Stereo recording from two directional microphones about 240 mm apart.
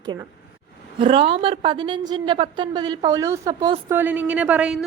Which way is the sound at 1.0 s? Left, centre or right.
Right.